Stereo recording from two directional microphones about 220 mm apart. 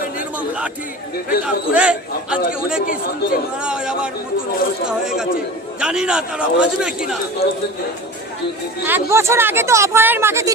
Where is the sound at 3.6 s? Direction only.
5° right (ahead or behind).